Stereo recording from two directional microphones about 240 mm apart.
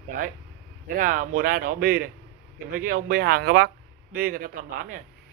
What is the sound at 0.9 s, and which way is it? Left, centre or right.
Speech, right.